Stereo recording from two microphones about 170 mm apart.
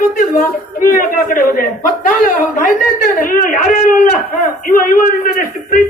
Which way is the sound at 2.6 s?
50° left (ahead or behind).